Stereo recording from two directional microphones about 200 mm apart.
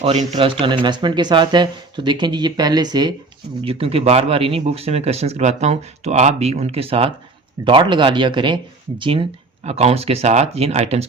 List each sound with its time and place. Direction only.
0.0 s speech: 30° right (ahead or behind)